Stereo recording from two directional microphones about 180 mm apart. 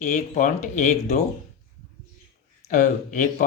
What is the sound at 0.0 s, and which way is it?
Speech, 45° left (ahead or behind).